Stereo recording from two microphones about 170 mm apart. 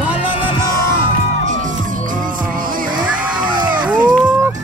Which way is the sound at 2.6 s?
55° right (ahead or behind).